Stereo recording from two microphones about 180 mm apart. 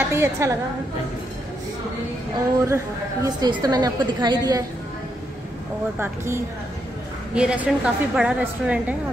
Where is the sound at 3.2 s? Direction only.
20° right (ahead or behind).